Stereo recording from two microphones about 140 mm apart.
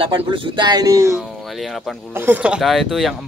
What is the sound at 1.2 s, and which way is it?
Speech, centre (ahead or behind).